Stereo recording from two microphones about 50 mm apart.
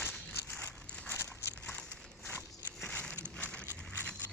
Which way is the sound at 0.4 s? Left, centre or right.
Left.